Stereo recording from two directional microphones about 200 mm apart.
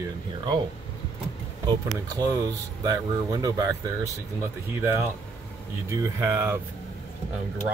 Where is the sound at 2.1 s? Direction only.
15° right (ahead or behind).